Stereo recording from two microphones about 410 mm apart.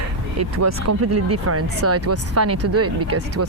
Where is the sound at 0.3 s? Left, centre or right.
Right.